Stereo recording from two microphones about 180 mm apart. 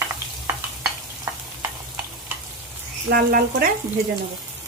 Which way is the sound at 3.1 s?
55° right (ahead or behind).